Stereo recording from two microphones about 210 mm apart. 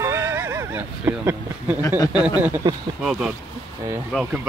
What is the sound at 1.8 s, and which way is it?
Speech, 15° left (ahead or behind).